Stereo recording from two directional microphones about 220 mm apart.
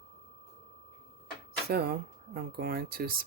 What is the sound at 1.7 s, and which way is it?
Speech, 45° right (ahead or behind).